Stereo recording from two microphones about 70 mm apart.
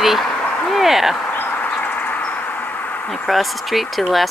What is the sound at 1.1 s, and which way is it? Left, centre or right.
Insect, left.